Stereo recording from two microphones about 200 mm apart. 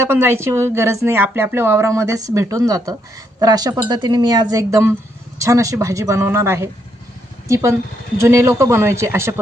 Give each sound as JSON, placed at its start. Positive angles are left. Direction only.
{"t": 0.0, "sound": "a woman's voice", "side_deg": -10}